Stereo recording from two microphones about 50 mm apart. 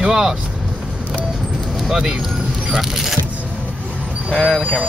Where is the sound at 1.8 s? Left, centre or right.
Centre.